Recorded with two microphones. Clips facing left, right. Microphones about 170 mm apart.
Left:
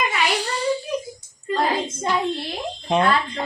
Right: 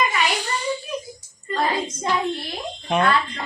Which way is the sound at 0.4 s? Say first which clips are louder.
Left 3 dB; 35° left (ahead or behind).